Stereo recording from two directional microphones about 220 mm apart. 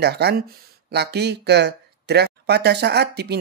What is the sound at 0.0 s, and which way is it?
Speech, 50° right (ahead or behind).